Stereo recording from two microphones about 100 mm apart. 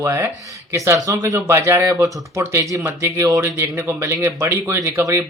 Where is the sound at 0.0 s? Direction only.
30° right (ahead or behind).